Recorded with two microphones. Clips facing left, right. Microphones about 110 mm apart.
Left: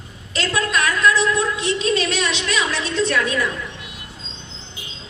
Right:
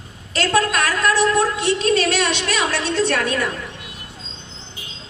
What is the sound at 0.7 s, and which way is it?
A woman's voice, 60° right (ahead or behind).